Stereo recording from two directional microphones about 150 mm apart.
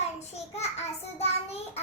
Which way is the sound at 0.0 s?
45° left (ahead or behind).